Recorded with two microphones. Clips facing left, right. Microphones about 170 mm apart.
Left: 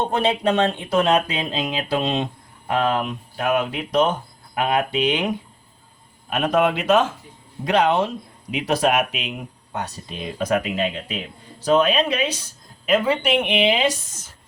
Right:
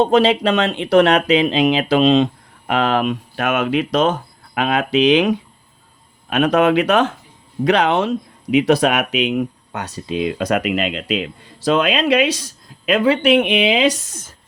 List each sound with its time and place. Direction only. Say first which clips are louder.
0.0 s speech: right 6 dB; 90° right